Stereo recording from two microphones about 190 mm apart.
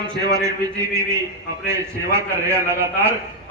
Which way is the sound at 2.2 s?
15° right (ahead or behind).